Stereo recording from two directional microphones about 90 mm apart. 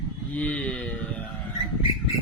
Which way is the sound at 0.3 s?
15° left (ahead or behind).